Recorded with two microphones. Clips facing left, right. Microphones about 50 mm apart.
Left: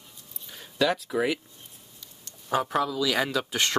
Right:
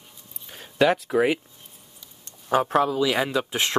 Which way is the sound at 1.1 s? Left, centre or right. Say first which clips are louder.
Right 5 dB; right.